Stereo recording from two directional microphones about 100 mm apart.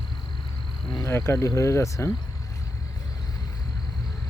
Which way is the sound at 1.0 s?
25° left (ahead or behind).